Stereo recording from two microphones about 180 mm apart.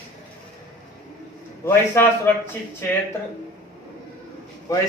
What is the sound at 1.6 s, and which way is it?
Speech, 10° left (ahead or behind).